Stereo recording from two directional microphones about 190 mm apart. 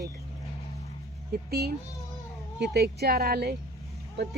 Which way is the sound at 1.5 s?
55° right (ahead or behind).